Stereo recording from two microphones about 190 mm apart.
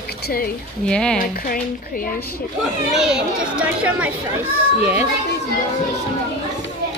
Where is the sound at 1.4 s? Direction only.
50° left (ahead or behind).